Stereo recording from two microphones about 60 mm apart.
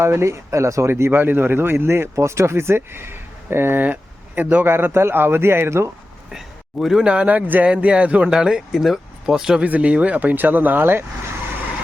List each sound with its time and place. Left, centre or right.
0.0 s speech: right
1.1 s speech: right
2.1 s speech: right
6.3 s a sound: centre
7.0 s speech: centre
8.3 s speech: centre
9.6 s speech: right